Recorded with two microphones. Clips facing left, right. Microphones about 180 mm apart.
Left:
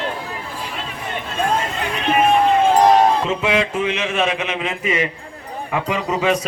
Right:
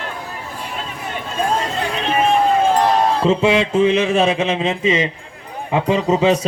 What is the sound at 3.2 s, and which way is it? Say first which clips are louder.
A man's voice: right 5 dB; 30° right (ahead or behind).